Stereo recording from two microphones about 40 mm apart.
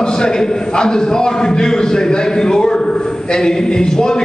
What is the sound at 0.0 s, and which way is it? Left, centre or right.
A man's voice, centre.